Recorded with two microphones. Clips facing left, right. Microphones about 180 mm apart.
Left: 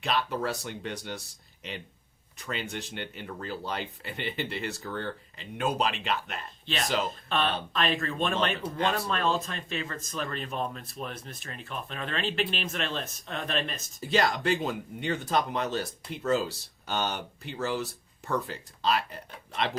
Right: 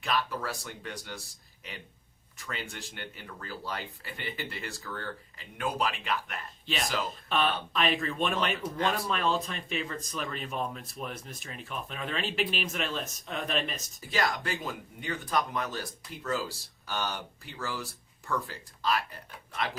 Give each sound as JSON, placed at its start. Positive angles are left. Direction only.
{"t": 0.0, "sound": "speech", "side_deg": 25}
{"t": 2.5, "sound": "speech", "side_deg": 25}
{"t": 7.3, "sound": "speech", "side_deg": -10}
{"t": 14.0, "sound": "speech", "side_deg": 20}